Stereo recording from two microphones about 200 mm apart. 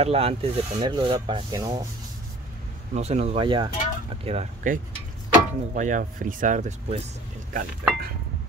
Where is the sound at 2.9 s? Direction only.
30° right (ahead or behind).